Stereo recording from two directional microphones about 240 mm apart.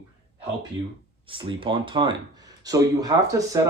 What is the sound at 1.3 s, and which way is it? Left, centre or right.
Speech, right.